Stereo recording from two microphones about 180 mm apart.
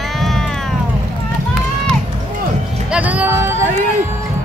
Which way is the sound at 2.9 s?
10° right (ahead or behind).